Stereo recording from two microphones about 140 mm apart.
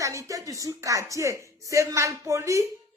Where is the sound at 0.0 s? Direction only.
20° right (ahead or behind).